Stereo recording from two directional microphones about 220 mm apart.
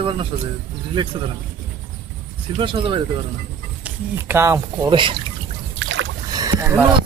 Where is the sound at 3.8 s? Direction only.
10° right (ahead or behind).